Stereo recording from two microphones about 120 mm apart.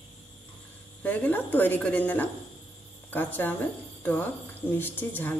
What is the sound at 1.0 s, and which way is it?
A woman's voice, 15° left (ahead or behind).